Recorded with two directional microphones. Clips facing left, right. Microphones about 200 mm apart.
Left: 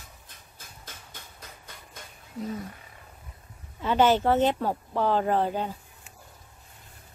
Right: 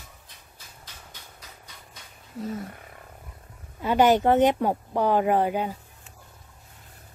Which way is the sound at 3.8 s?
10° right (ahead or behind).